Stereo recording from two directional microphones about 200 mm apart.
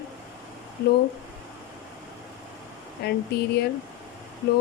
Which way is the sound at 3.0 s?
55° left (ahead or behind).